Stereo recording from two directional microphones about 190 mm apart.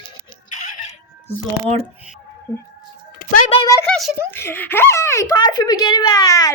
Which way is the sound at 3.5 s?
25° left (ahead or behind).